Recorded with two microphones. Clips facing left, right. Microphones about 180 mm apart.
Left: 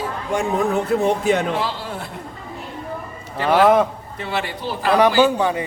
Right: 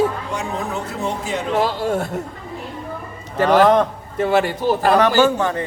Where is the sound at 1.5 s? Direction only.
45° right (ahead or behind).